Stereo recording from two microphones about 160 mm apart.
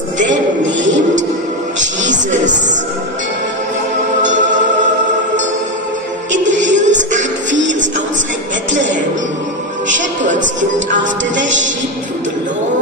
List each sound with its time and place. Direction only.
1.8 s music: 50° right (ahead or behind)
4.2 s music: 50° right (ahead or behind)
6.3 s music: 50° right (ahead or behind)
9.8 s music: 50° right (ahead or behind)